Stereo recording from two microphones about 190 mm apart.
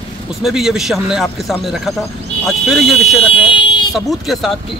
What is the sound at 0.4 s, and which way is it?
Speech, centre (ahead or behind).